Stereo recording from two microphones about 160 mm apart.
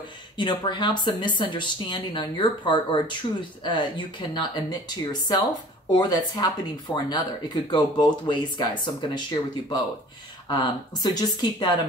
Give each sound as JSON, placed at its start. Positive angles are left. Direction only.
{"t": 0.4, "sound": "speech", "side_deg": 30}